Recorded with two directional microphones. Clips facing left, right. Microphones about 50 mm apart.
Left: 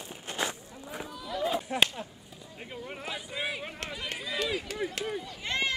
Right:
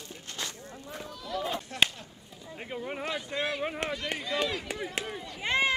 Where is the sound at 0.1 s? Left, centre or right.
Centre.